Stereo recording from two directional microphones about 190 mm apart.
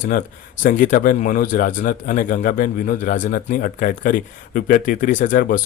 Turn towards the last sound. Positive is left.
turn(degrees=45)  # may be behind; listen again after turning